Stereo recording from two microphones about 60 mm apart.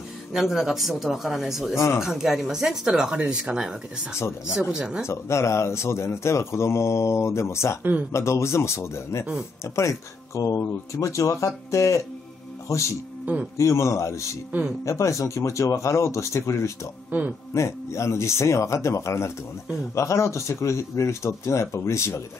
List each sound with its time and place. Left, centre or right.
0.3 s speech: centre
5.0 s speech: left
13.2 s speech: right
13.6 s speech: left
17.1 s a man's voice: right
17.6 s speech: left